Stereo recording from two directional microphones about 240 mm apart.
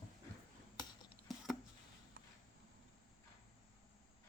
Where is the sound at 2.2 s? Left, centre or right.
Right.